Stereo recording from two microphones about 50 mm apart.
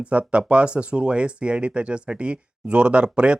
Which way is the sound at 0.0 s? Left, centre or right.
Right.